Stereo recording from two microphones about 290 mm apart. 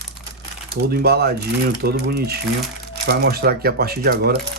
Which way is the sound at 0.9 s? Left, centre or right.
Right.